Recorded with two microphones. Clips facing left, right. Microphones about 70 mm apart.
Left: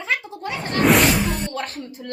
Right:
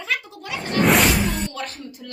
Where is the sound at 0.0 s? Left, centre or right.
Left.